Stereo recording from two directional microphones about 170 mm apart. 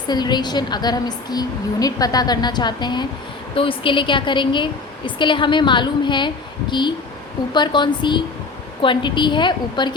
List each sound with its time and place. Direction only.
0.1 s a woman's voice: 25° left (ahead or behind)